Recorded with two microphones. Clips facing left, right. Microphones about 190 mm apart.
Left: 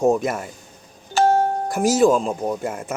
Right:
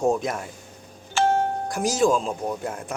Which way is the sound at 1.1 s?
40° left (ahead or behind).